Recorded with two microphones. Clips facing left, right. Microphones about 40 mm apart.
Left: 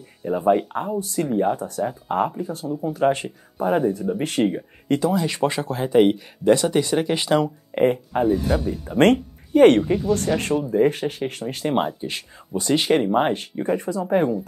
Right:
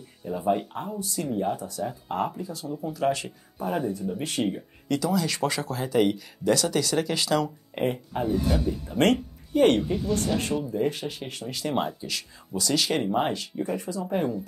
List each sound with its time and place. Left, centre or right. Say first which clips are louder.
0.2 s speech: left 7 dB; left
0.7 s speech: left 7 dB; left
1.9 s speech: left 5 dB; left
2.4 s speech: left 6 dB; left
4.5 s speech: left 5 dB; left
7.7 s speech: left 9 dB; left
13.3 s speech: left 6 dB; left